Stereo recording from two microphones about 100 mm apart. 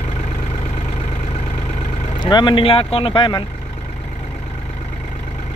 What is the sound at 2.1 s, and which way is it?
Speech, 50° left (ahead or behind).